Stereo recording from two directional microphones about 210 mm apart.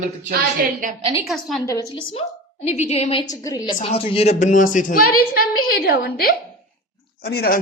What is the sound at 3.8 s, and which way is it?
A woman's voice, 25° left (ahead or behind).